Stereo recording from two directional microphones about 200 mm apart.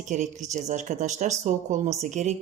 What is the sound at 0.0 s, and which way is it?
Speech, 35° right (ahead or behind).